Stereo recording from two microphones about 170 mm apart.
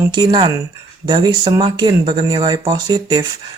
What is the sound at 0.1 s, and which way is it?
Speech, 25° right (ahead or behind).